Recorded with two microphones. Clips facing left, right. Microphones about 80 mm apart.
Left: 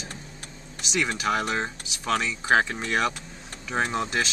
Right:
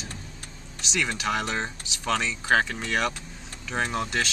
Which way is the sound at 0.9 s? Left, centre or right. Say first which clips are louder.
Left 2 dB; centre.